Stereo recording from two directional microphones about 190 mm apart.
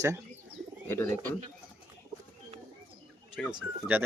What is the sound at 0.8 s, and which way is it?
Speech, 15° left (ahead or behind).